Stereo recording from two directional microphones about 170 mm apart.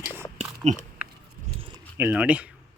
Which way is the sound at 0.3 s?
40° right (ahead or behind).